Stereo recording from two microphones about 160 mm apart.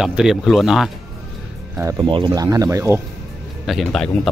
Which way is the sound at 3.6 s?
Centre (ahead or behind).